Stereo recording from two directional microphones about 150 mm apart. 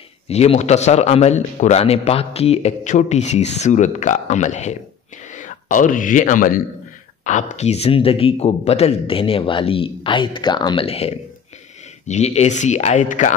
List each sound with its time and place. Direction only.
0.3 s a man's voice: 45° left (ahead or behind); by 6.6 s 65° left (ahead or behind)
7.2 s a man's voice: 55° left (ahead or behind)